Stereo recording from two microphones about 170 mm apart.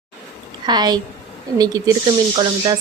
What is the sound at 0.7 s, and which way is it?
Speech, 25° right (ahead or behind).